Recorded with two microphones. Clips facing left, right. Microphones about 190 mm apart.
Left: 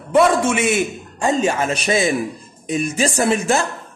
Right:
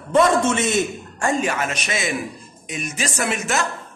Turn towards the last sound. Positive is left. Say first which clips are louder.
# left 6 dB
turn(degrees=30)  # may be behind; listen again after turning